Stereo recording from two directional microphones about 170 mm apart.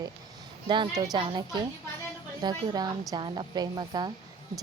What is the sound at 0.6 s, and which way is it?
Speech, 30° right (ahead or behind).